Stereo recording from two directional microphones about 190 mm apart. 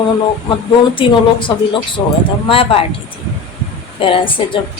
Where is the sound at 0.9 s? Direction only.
25° left (ahead or behind).